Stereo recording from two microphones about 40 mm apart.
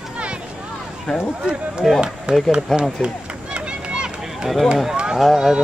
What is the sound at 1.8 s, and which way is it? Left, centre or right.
Speech, centre.